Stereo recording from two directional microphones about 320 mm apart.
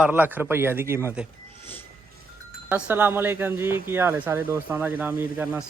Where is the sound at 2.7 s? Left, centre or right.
Centre.